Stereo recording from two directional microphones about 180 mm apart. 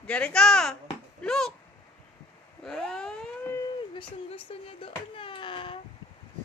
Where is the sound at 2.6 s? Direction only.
5° left (ahead or behind).